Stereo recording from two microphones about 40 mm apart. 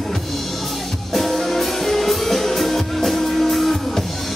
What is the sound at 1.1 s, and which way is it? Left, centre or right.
Music, centre.